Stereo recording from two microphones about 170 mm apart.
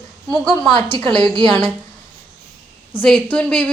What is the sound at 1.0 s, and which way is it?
Speech, 5° left (ahead or behind).